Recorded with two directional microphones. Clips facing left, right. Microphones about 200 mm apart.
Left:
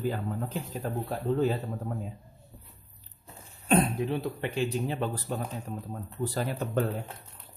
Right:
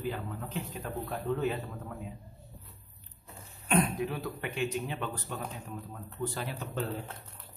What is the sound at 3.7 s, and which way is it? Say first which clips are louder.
Speech: left 4 dB; 30° left (ahead or behind).